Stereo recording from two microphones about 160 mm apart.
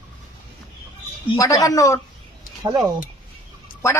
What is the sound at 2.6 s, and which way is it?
Speech, 20° right (ahead or behind).